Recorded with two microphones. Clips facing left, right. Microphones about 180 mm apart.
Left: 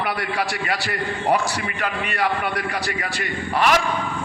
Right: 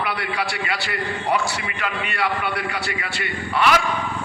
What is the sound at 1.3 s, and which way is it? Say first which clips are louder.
A man's voice: left 3 dB; 45° left (ahead or behind).